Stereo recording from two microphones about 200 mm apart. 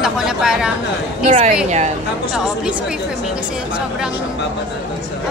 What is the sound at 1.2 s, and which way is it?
Speech, 40° right (ahead or behind).